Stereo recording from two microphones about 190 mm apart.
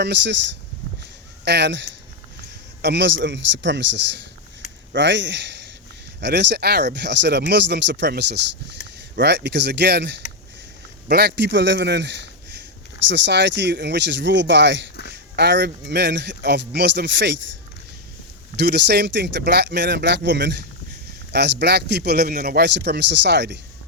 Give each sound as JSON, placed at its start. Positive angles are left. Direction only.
{"t": 0.0, "sound": "speech", "side_deg": -65}
{"t": 1.5, "sound": "a man's voice", "side_deg": -65}
{"t": 18.5, "sound": "speech", "side_deg": -60}